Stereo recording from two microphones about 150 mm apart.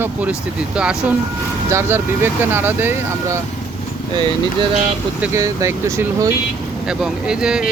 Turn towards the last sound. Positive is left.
turn(degrees=-5)  # may be behind; listen again after turning